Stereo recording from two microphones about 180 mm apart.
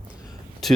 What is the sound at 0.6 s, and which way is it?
Speech, centre (ahead or behind).